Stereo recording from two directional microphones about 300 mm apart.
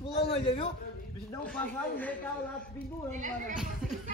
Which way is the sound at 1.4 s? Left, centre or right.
Centre.